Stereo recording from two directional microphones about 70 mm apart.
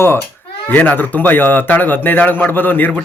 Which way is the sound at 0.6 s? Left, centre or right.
Left.